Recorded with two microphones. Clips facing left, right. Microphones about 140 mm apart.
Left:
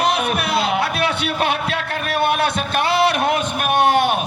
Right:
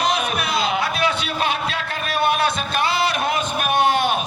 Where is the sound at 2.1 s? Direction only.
60° left (ahead or behind).